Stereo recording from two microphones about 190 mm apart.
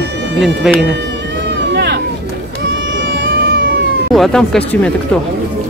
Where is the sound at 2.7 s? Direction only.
75° right (ahead or behind).